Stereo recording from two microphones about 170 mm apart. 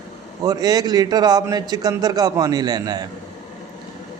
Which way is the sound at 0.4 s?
20° right (ahead or behind).